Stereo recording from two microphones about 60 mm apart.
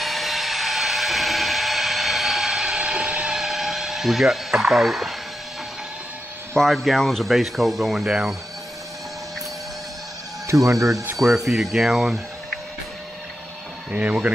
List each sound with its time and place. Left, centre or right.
0.0 s a sound: centre
6.5 s speech: centre
10.4 s speech: right
11.1 s speech: centre
13.9 s speech: right